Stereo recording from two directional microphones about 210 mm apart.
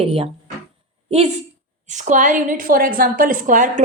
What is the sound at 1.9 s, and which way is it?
A woman's voice, 35° right (ahead or behind).